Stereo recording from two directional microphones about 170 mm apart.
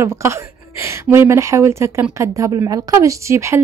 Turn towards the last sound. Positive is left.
turn(degrees=-15)  # may be behind; listen again after turning